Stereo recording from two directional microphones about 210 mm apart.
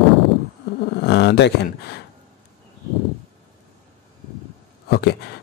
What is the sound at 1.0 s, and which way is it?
Speech, 50° left (ahead or behind).